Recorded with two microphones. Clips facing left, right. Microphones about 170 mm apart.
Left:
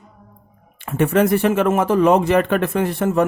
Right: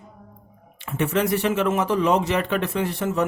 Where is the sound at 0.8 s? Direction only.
50° left (ahead or behind).